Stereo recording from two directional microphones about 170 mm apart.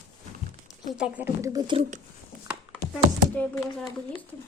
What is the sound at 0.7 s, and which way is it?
Speech, 5° right (ahead or behind).